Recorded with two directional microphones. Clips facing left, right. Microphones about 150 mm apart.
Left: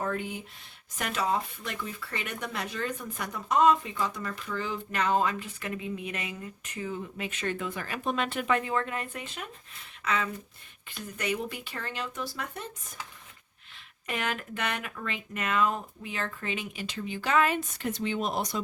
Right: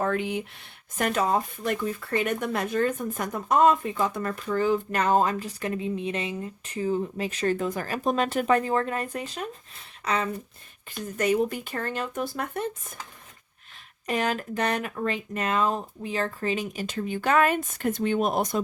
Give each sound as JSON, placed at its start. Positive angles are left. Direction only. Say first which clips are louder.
{"t": 0.0, "sound": "speech", "louder": "right 6 dB", "side_deg": -85}
{"t": 0.9, "sound": "speech", "louder": "right 5 dB", "side_deg": -50}
{"t": 14.1, "sound": "speech", "louder": "right 6 dB", "side_deg": -35}